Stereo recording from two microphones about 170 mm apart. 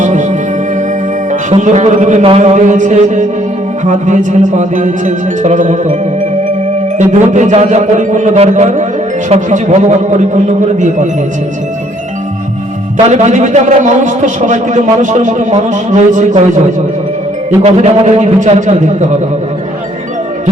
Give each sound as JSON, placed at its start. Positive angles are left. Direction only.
{"t": 0.0, "sound": "music", "side_deg": -45}
{"t": 2.2, "sound": "a man's voice", "side_deg": -40}
{"t": 7.0, "sound": "a man's voice", "side_deg": -45}
{"t": 13.1, "sound": "a man's voice", "side_deg": -45}
{"t": 17.6, "sound": "a man's voice", "side_deg": -40}